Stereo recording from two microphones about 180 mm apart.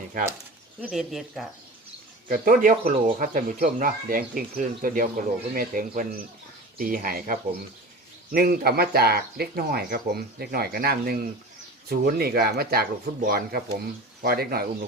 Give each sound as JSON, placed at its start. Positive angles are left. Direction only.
{"t": 0.8, "sound": "speech", "side_deg": 0}
{"t": 2.3, "sound": "speech", "side_deg": -50}